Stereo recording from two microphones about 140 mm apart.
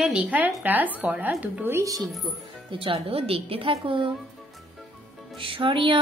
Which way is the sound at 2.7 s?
40° right (ahead or behind).